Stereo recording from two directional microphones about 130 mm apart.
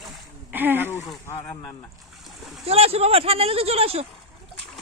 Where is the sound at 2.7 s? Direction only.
50° right (ahead or behind).